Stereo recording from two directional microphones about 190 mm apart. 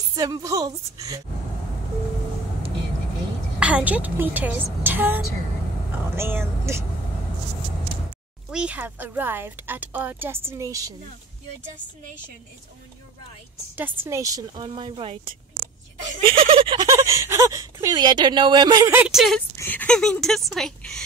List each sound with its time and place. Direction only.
0.1 s speech: 20° right (ahead or behind)
3.5 s speech: 5° right (ahead or behind)
8.5 s speech: 5° right (ahead or behind)
13.7 s speech: 10° right (ahead or behind); by 15.1 s 25° right (ahead or behind)
15.5 s a sound: 50° right (ahead or behind)
16.2 s speech: 30° right (ahead or behind)
18.9 s speech: 10° right (ahead or behind)
19.5 s speech: 10° left (ahead or behind)